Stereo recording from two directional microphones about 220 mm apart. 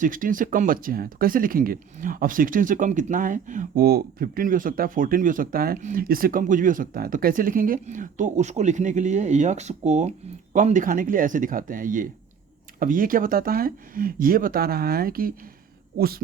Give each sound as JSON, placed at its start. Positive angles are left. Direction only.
{"t": 0.0, "sound": "speech", "side_deg": -35}